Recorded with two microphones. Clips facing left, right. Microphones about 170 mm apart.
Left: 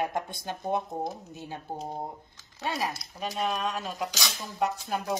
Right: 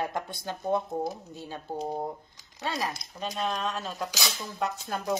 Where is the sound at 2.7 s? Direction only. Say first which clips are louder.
Left 1 dB; 15° left (ahead or behind).